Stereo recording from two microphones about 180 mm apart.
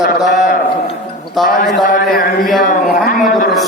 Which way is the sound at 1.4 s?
Centre (ahead or behind).